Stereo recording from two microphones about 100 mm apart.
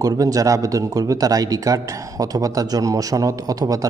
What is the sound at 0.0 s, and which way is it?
Speech, 35° right (ahead or behind).